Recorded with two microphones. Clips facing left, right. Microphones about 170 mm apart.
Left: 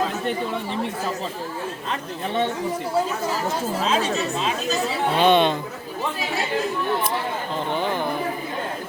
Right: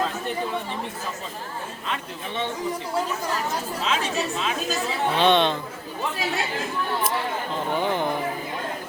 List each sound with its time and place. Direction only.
3.8 s speech: 35° left (ahead or behind)
5.1 s speech: 5° left (ahead or behind)
7.7 s speech: 15° right (ahead or behind)